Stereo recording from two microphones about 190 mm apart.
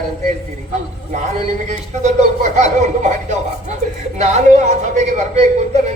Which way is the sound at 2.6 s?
40° right (ahead or behind).